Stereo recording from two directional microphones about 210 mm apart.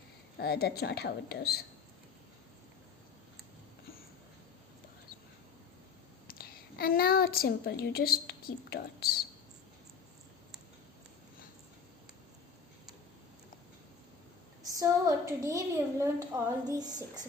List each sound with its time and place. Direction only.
0.3 s a woman's voice: 50° left (ahead or behind)
6.2 s a woman's voice: 45° left (ahead or behind)
14.7 s a woman's voice: 15° right (ahead or behind)